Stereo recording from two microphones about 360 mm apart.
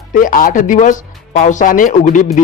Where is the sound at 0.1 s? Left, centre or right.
Left.